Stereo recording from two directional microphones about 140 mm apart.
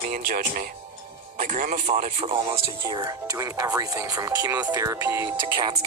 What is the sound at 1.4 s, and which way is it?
Speech, 70° right (ahead or behind).